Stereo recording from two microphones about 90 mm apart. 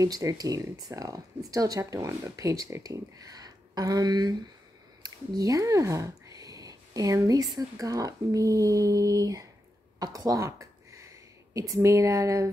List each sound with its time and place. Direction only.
0.0 s speech: 40° right (ahead or behind)
5.0 s a sound: 45° right (ahead or behind)
7.5 s speech: 45° right (ahead or behind)